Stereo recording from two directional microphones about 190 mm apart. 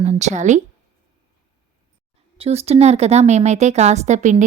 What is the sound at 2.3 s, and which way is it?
A woman's voice, 35° right (ahead or behind).